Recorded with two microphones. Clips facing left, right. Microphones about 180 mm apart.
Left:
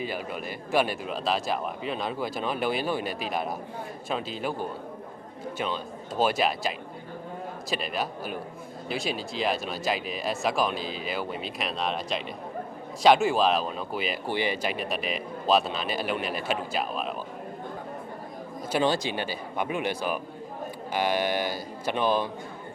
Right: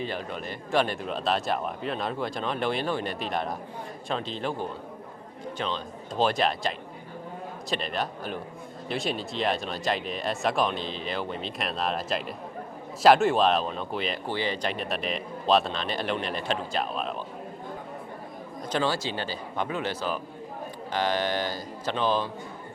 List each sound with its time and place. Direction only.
0.0 s speech: 10° left (ahead or behind)
5.5 s speech: 10° left (ahead or behind)
18.7 s speech: 15° left (ahead or behind)